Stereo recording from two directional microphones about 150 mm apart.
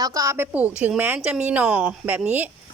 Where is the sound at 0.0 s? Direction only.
20° right (ahead or behind).